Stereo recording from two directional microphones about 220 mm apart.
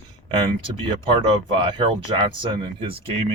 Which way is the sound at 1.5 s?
20° right (ahead or behind).